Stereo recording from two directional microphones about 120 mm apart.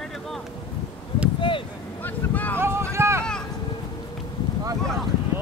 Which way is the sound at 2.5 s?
20° right (ahead or behind).